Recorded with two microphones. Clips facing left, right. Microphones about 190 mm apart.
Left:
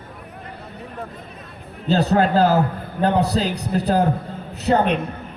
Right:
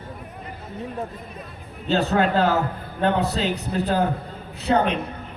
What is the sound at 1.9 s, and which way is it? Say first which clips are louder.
A man's voice: left 3 dB; 35° left (ahead or behind).